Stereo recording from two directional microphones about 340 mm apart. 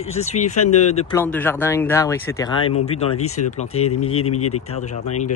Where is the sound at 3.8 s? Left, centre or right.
Left.